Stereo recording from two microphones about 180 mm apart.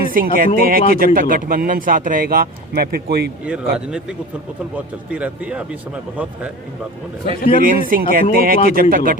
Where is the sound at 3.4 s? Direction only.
5° right (ahead or behind).